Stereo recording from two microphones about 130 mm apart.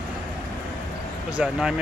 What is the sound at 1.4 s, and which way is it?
Speech, 5° right (ahead or behind).